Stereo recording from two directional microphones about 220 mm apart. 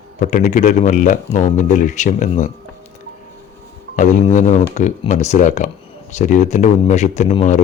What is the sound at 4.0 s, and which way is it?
Speech, 35° left (ahead or behind).